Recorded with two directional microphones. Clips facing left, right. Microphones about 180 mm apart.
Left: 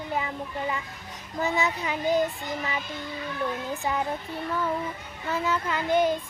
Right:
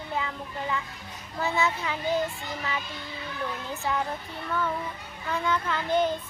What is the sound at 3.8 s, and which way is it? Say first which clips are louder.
Child singing: even; 15° left (ahead or behind).